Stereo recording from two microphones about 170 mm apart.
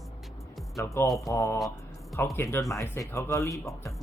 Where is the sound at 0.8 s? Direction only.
20° left (ahead or behind).